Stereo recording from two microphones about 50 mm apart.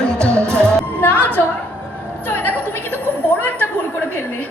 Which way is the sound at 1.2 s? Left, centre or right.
Left.